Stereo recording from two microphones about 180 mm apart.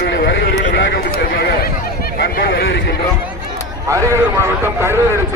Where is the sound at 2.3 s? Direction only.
60° left (ahead or behind).